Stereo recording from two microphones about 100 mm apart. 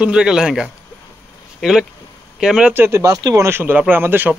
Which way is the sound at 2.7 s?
20° right (ahead or behind).